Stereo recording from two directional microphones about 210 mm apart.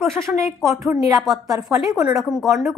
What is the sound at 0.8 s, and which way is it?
Speech, 15° right (ahead or behind).